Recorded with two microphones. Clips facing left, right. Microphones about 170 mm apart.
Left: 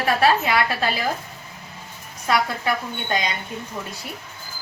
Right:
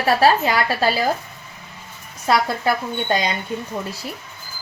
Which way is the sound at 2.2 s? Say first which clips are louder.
Right 3 dB; 35° right (ahead or behind).